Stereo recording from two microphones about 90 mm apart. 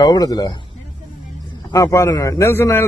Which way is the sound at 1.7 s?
35° left (ahead or behind).